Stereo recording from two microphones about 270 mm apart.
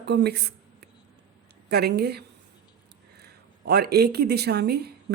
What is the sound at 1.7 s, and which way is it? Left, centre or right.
Speech, right.